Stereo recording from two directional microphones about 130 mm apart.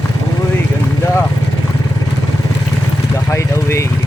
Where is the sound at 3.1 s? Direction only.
20° left (ahead or behind).